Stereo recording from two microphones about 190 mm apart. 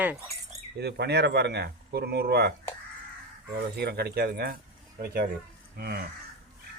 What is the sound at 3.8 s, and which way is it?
Speech, 55° right (ahead or behind).